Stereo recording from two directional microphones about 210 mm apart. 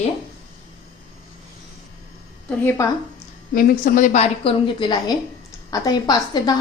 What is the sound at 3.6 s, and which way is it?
A woman's voice, 40° left (ahead or behind).